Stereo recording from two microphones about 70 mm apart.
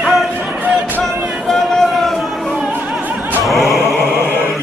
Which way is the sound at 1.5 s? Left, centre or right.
Centre.